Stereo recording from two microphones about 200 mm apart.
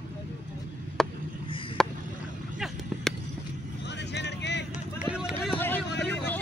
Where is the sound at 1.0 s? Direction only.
Centre (ahead or behind).